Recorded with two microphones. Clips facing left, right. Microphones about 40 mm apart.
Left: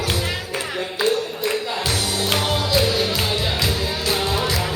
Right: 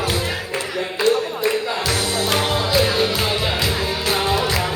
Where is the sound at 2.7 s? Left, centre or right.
Right.